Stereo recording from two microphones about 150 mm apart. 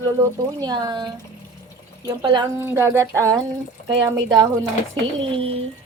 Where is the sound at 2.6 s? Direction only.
15° right (ahead or behind); by 5.5 s 35° right (ahead or behind).